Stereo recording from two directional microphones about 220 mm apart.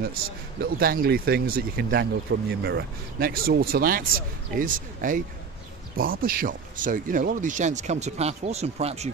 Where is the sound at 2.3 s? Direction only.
55° right (ahead or behind).